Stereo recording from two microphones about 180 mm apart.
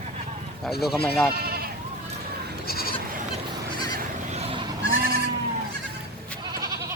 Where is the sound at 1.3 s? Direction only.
55° right (ahead or behind).